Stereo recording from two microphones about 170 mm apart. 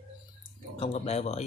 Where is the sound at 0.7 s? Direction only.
40° left (ahead or behind).